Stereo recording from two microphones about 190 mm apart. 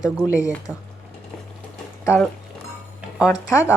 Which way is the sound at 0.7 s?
10° left (ahead or behind).